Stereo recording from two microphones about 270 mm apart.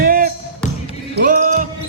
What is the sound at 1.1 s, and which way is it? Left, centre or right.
Music, right.